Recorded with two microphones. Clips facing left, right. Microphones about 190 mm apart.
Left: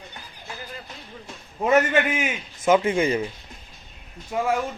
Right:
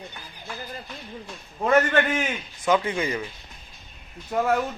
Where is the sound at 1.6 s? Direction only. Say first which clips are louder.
Left 1 dB; 5° left (ahead or behind).